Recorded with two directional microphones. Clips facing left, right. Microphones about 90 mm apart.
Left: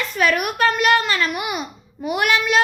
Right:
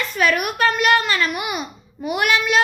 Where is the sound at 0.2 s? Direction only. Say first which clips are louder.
Even; 35° left (ahead or behind).